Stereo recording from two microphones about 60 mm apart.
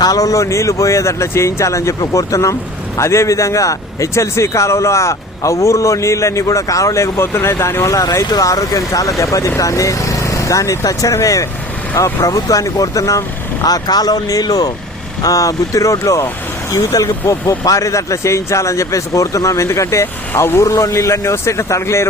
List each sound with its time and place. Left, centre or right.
0.0 s speech: left
7.3 s a man's voice: left
7.9 s speech: left
15.2 s speech: left
17.5 s speech: left
20.3 s a man's voice: left
20.7 s a man's voice: left